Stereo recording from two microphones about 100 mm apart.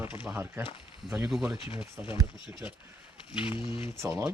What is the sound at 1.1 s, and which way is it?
Speech, 5° right (ahead or behind).